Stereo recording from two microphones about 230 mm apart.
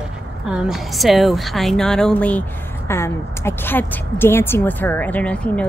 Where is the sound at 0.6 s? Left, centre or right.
Centre.